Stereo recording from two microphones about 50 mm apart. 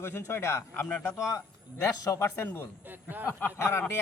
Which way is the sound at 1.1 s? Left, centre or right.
Left.